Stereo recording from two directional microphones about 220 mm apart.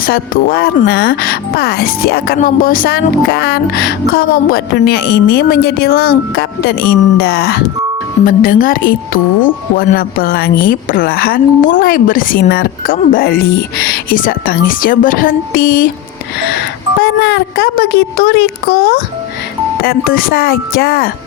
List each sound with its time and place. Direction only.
0.0 s speech: 40° left (ahead or behind)
17.0 s speech: 50° left (ahead or behind)